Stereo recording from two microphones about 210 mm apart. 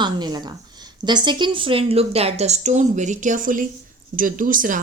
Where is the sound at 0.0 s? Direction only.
20° right (ahead or behind).